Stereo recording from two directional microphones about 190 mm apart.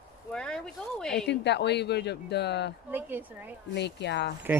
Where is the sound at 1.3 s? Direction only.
65° left (ahead or behind).